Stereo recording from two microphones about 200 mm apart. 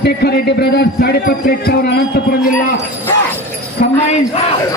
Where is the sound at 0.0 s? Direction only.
55° left (ahead or behind).